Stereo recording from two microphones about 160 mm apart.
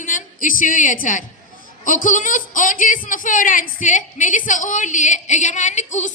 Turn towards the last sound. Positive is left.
turn(degrees=45)  # may be behind; listen again after turning